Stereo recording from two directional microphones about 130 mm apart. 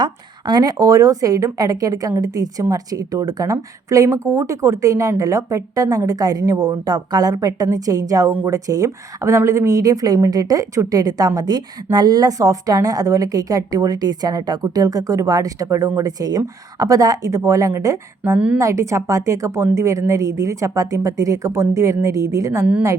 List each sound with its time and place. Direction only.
0.0 s a woman's voice: 35° right (ahead or behind)
18.3 s a woman's voice: 10° right (ahead or behind)
18.6 s a woman's voice: 25° right (ahead or behind)